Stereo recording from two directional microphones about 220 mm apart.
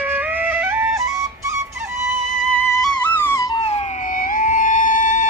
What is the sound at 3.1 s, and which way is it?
Music, 10° left (ahead or behind).